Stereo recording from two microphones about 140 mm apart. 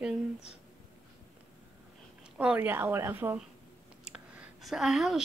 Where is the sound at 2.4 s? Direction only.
10° right (ahead or behind).